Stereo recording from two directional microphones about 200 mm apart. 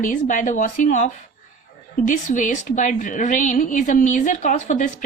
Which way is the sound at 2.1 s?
40° left (ahead or behind).